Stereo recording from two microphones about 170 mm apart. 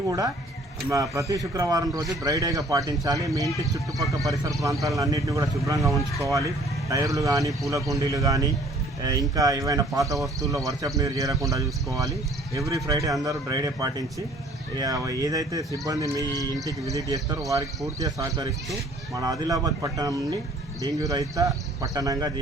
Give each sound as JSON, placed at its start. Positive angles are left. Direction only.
{"t": 0.9, "sound": "speech", "side_deg": -20}
{"t": 18.0, "sound": "speech", "side_deg": -20}